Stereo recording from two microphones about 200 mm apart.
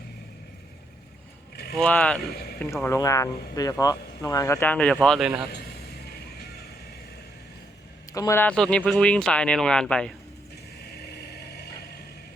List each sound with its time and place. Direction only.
1.8 s speech: 5° left (ahead or behind)
2.3 s a man's voice: 50° left (ahead or behind)
2.8 s speech: 15° left (ahead or behind)
5.5 s vehicle: 50° left (ahead or behind)
8.1 s speech: 15° left (ahead or behind)
11.3 s vehicle: 55° left (ahead or behind)